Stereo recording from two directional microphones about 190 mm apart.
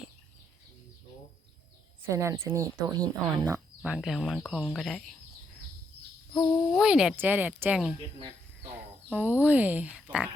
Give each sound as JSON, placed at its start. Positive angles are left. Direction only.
{"t": 2.0, "sound": "speech", "side_deg": -15}
{"t": 3.9, "sound": "speech", "side_deg": 0}
{"t": 6.4, "sound": "speech", "side_deg": -5}
{"t": 9.0, "sound": "speech", "side_deg": -10}